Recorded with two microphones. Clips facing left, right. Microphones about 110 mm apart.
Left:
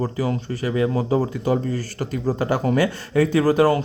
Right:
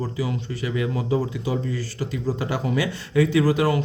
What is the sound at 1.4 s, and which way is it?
Speech, 50° left (ahead or behind).